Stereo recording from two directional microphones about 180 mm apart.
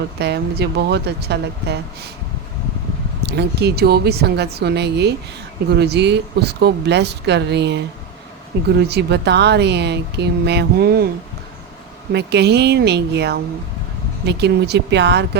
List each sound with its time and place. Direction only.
0.2 s speech: 70° right (ahead or behind)
3.2 s a woman's voice: 65° right (ahead or behind)
12.1 s speech: 70° right (ahead or behind)